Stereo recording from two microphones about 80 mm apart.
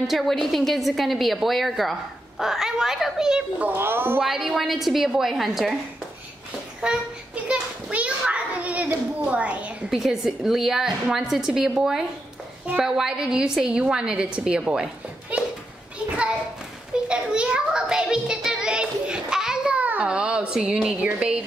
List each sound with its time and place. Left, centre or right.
0.0 s a woman's voice: centre
3.6 s a woman's voice: right
4.2 s a woman's voice: centre
6.8 s a woman's voice: centre
7.4 s children playing: centre
9.8 s a woman's voice: centre
17.1 s child singing: centre